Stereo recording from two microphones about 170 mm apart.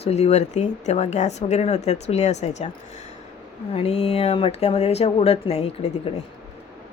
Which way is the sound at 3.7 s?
35° left (ahead or behind).